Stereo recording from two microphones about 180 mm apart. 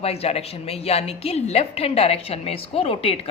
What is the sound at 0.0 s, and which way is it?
A woman's voice, 35° left (ahead or behind).